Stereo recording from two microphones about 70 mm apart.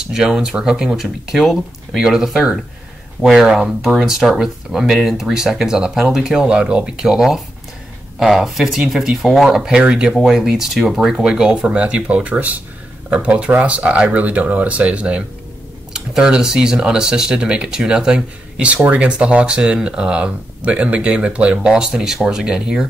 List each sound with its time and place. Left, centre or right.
0.0 s speech: centre